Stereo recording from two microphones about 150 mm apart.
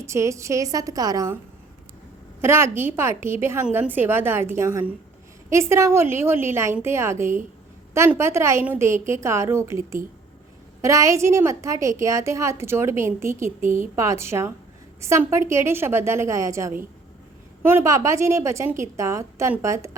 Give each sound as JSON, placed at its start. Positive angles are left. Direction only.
{"t": 0.0, "sound": "a woman's voice", "side_deg": -20}
{"t": 2.4, "sound": "a woman's voice", "side_deg": -15}